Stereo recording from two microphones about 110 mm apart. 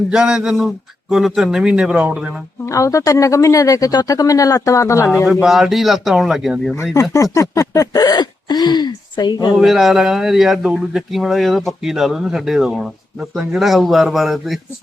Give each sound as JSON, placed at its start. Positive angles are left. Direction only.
{"t": 0.1, "sound": "a man's voice", "side_deg": -5}
{"t": 2.6, "sound": "speech", "side_deg": 30}
{"t": 5.2, "sound": "speech", "side_deg": -5}
{"t": 6.9, "sound": "speech", "side_deg": 30}
{"t": 9.6, "sound": "speech", "side_deg": 0}